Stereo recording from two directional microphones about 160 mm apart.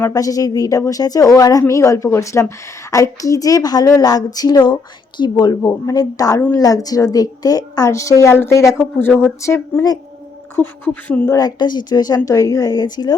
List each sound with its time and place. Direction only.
0.0 s a woman's voice: 20° left (ahead or behind)
11.3 s a woman's voice: 25° left (ahead or behind)